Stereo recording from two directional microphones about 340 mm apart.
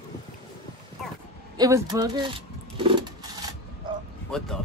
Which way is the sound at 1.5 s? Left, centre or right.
Centre.